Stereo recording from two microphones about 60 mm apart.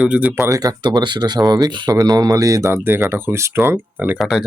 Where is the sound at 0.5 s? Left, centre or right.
Right.